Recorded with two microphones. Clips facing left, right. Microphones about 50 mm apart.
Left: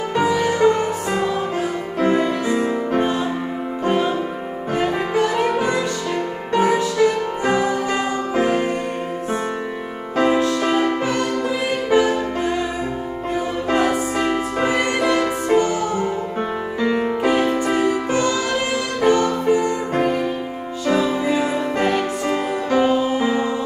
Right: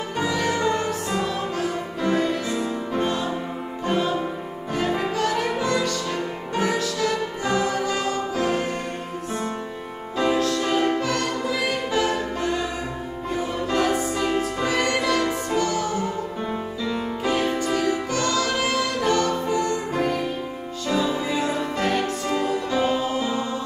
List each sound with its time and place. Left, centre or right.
0.2 s music: left
2.5 s music: left
3.9 s music: left
10.2 s music: left
13.7 s music: left
14.1 s music: left
16.8 s music: left
17.3 s music: centre
20.8 s music: left
21.3 s music: left
22.3 s music: left